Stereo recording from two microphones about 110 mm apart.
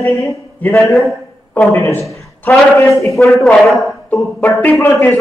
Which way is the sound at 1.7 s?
25° left (ahead or behind).